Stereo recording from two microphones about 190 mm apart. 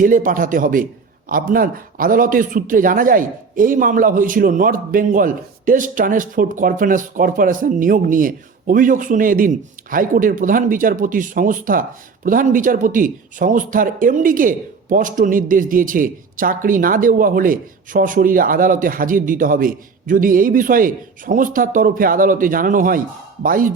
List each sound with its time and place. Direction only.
0.0 s a man's voice: 45° right (ahead or behind)